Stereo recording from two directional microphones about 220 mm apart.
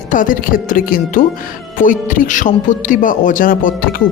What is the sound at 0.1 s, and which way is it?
A woman's voice, 35° left (ahead or behind).